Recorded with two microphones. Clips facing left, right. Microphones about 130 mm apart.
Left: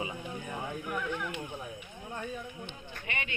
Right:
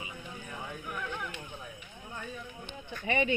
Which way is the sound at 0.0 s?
30° left (ahead or behind).